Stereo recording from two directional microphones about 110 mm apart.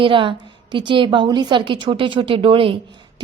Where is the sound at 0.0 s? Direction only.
50° right (ahead or behind).